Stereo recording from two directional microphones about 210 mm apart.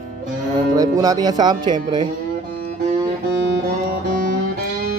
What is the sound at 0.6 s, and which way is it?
Speech, 15° right (ahead or behind).